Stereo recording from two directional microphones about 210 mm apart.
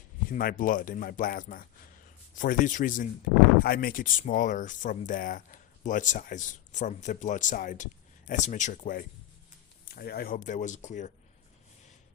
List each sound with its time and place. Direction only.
0.3 s speech: 40° left (ahead or behind)